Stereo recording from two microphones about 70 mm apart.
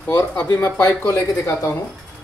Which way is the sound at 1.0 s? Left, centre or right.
Left.